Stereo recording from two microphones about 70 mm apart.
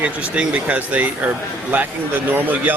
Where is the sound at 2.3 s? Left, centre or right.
Right.